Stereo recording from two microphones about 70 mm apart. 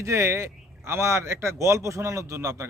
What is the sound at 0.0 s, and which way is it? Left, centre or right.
Speech, right.